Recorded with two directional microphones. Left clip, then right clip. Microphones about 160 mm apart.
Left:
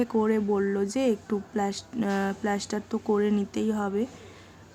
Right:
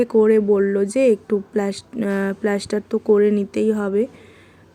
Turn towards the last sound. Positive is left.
turn(degrees=-20)  # may be behind; listen again after turning